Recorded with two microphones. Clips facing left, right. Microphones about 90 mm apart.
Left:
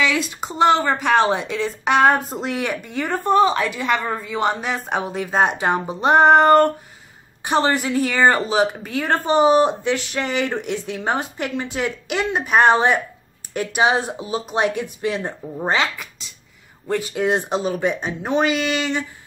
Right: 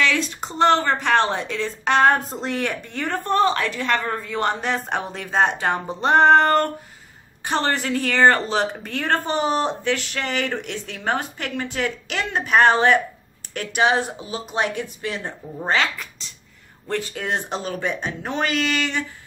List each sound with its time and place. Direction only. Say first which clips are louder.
0.0 s speech: left 1 dB; 10° left (ahead or behind)